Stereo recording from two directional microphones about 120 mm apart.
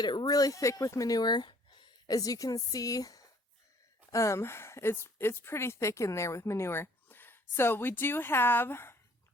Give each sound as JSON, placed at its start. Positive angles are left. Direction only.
{"t": 0.0, "sound": "a woman's voice", "side_deg": 40}